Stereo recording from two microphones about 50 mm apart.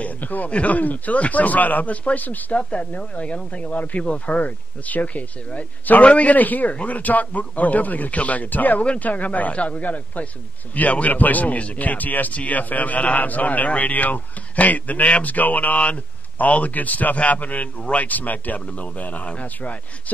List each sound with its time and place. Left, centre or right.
0.0 s speech: left
4.0 s speech: centre
4.4 s a man's voice: left